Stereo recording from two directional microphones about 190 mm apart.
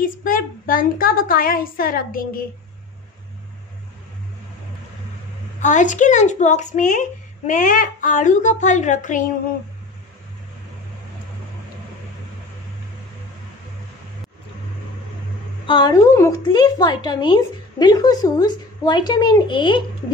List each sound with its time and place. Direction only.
0.0 s speech: 45° left (ahead or behind)
5.6 s a woman's voice: 40° left (ahead or behind)
15.6 s a woman's voice: 25° left (ahead or behind)